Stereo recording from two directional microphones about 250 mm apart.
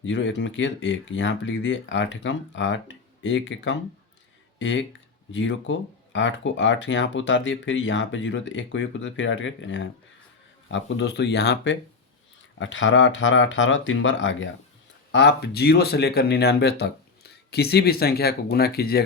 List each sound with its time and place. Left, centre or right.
0.0 s speech: left